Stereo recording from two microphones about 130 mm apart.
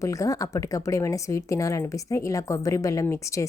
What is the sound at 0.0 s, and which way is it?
A woman's voice, 25° left (ahead or behind).